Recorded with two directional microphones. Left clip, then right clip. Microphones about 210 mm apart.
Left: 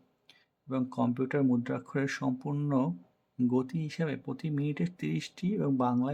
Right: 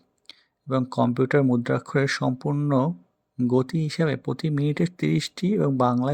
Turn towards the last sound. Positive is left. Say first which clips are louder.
# right 8 dB
turn(degrees=-30)  # may be behind; listen again after turning